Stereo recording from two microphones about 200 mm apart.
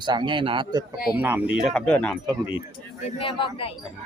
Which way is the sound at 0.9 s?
50° left (ahead or behind).